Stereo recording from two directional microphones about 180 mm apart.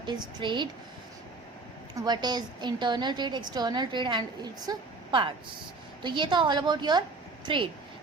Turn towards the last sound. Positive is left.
turn(degrees=-25)  # may be behind; listen again after turning